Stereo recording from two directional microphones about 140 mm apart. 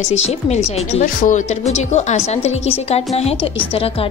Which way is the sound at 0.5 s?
55° left (ahead or behind).